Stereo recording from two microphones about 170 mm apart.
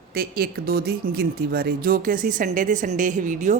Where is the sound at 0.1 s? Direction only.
60° right (ahead or behind).